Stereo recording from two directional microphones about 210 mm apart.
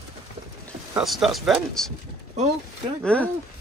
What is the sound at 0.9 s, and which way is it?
Speech, centre (ahead or behind).